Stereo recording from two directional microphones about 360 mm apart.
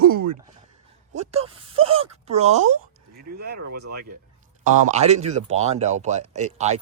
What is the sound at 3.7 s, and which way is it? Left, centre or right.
Speech, right.